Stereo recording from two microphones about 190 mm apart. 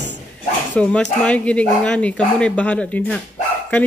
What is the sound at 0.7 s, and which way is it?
Speech, 5° left (ahead or behind).